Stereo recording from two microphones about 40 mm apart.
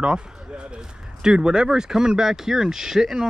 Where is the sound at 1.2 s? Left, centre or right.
Right.